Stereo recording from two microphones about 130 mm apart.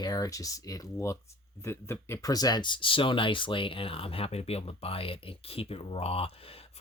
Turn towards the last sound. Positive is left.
turn(degrees=45)  # may be behind; listen again after turning